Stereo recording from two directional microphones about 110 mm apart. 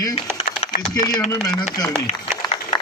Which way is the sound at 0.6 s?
70° left (ahead or behind).